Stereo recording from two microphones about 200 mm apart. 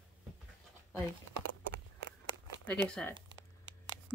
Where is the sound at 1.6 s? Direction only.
70° right (ahead or behind).